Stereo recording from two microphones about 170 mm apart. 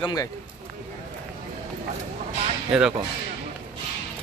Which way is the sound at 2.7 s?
5° right (ahead or behind).